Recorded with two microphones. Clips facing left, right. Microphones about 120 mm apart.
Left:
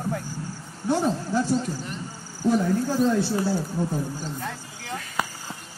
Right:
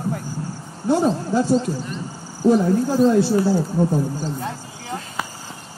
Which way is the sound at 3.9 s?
30° right (ahead or behind).